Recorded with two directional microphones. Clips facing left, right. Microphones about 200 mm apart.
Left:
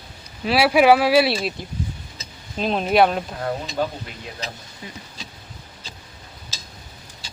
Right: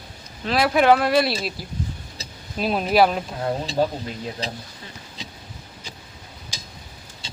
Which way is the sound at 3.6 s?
30° right (ahead or behind).